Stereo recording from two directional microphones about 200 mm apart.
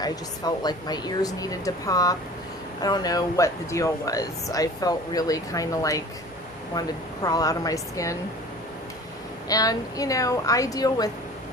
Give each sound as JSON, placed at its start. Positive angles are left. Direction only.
{"t": 0.0, "sound": "speech", "side_deg": 20}
{"t": 9.5, "sound": "speech", "side_deg": 20}